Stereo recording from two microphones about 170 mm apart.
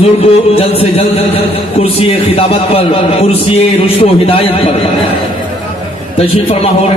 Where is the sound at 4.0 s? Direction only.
35° left (ahead or behind).